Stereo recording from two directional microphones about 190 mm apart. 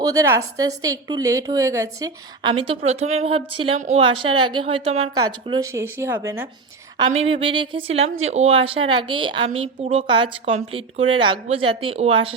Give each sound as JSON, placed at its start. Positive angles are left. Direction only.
{"t": 0.0, "sound": "a woman's voice", "side_deg": -15}
{"t": 5.7, "sound": "speech", "side_deg": -15}
{"t": 7.2, "sound": "a woman's voice", "side_deg": -30}